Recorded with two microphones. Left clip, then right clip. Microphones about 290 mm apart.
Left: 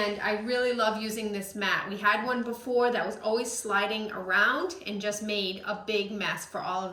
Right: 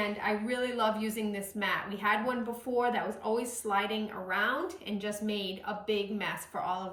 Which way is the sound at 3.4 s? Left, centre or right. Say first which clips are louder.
Left 3 dB; right.